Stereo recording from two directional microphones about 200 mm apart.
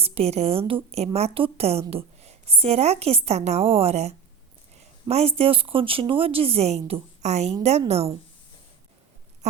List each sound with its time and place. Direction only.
0.0 s a woman's voice: 30° right (ahead or behind)
4.8 s a sound: 30° right (ahead or behind)
5.4 s a woman's voice: 25° right (ahead or behind)